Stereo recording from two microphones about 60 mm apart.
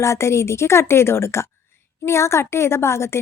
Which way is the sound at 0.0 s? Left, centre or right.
Left.